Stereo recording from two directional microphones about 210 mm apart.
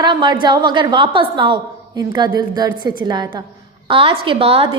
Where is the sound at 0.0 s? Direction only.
20° right (ahead or behind).